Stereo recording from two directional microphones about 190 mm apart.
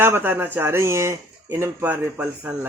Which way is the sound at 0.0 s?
10° right (ahead or behind).